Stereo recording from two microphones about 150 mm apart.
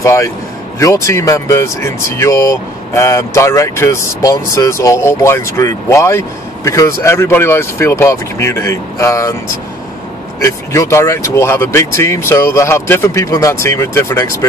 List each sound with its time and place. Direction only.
0.0 s speech: 20° left (ahead or behind)
10.4 s speech: 20° left (ahead or behind)